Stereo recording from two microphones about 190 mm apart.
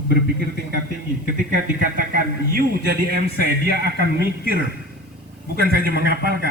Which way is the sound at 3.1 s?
55° right (ahead or behind).